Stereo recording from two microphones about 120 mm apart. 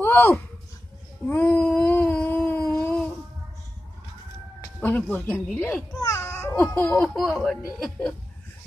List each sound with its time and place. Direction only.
0.0 s a sound: 15° left (ahead or behind)
4.8 s speech: 15° left (ahead or behind)
5.9 s babbling: 25° left (ahead or behind)
6.5 s speech: 10° left (ahead or behind)